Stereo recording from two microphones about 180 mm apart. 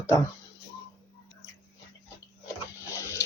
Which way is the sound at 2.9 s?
15° left (ahead or behind).